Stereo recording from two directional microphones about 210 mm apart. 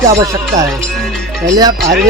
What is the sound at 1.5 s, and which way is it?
Speech, 15° right (ahead or behind).